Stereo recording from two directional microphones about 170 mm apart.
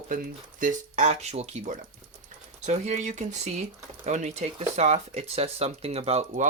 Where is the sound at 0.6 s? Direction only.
45° right (ahead or behind).